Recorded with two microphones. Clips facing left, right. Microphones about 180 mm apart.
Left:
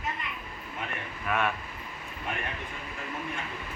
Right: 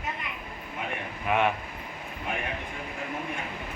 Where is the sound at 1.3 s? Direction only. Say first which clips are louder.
Right 4 dB; 20° right (ahead or behind).